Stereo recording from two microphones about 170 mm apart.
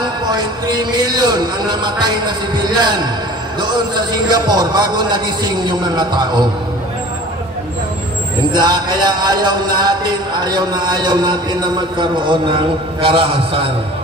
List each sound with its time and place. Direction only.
0.0 s music: 25° right (ahead or behind)
8.5 s music: 25° right (ahead or behind)